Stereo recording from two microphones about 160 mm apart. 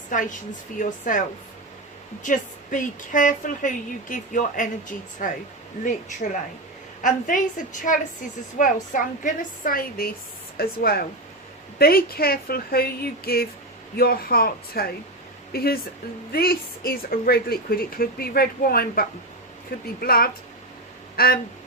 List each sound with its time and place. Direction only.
0.1 s a woman's voice: 55° left (ahead or behind)
2.2 s a woman's voice: 55° left (ahead or behind); by 21.3 s 70° left (ahead or behind)